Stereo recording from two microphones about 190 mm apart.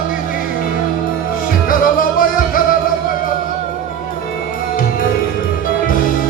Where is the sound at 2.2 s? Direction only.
45° left (ahead or behind).